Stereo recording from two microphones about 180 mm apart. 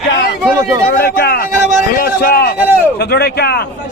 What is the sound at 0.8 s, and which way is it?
A man's voice, 55° left (ahead or behind).